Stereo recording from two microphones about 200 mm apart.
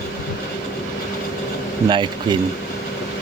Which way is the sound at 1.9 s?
25° right (ahead or behind).